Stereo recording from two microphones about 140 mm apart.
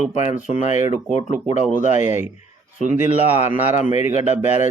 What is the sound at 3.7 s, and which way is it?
Speech, 55° left (ahead or behind).